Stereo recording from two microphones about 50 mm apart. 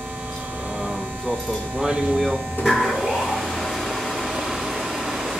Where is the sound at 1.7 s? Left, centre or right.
Centre.